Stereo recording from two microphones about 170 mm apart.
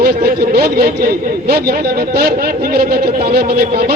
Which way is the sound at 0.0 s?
65° right (ahead or behind).